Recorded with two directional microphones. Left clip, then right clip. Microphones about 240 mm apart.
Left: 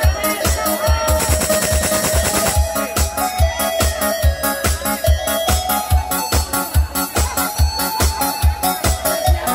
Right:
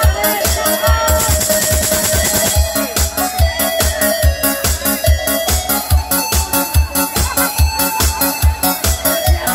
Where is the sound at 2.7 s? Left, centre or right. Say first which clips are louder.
Right 2 dB; right.